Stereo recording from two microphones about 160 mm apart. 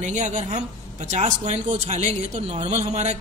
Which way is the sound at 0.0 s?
50° right (ahead or behind).